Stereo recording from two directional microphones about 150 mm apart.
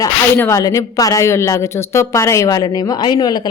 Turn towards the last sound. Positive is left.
turn(degrees=25)  # may be behind; listen again after turning